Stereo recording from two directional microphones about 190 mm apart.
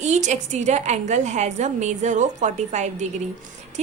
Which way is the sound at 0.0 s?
40° right (ahead or behind).